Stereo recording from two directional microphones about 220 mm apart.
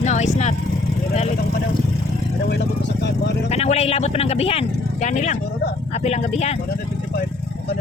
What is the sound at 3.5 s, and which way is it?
Speech, 30° left (ahead or behind).